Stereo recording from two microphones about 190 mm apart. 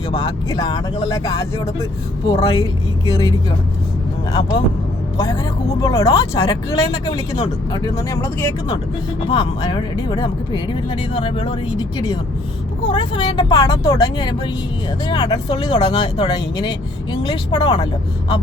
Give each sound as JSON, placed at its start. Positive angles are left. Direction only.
{"t": 0.2, "sound": "a woman's voice", "side_deg": 20}